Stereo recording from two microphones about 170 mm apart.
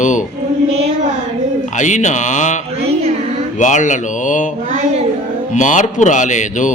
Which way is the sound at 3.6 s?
45° left (ahead or behind).